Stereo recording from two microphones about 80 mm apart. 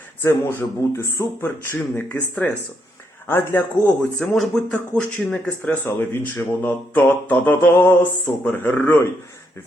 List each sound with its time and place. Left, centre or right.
0.3 s speech: left
1.7 s speech: left
3.2 s speech: left
3.8 s speech: centre
5.8 s speech: left